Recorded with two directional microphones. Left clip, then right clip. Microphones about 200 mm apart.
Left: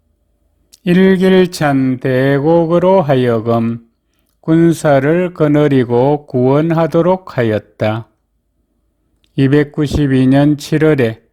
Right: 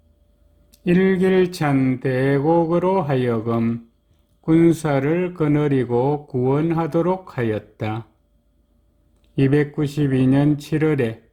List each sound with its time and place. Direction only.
0.7 s speech: 40° left (ahead or behind)
9.2 s speech: 35° left (ahead or behind)